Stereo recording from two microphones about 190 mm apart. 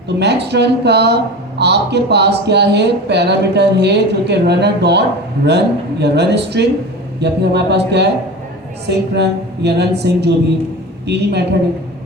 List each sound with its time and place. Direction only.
0.2 s a woman's voice: 60° right (ahead or behind)